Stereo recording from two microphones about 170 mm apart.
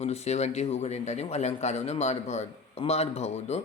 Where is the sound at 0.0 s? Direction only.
40° left (ahead or behind).